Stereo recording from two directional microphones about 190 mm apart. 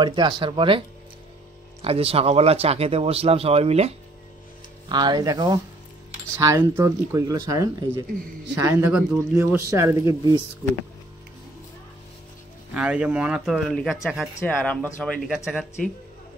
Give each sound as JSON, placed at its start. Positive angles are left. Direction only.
{"t": 0.0, "sound": "speech", "side_deg": -25}
{"t": 4.8, "sound": "speech", "side_deg": -25}
{"t": 12.7, "sound": "speech", "side_deg": -5}
{"t": 15.2, "sound": "speech", "side_deg": -5}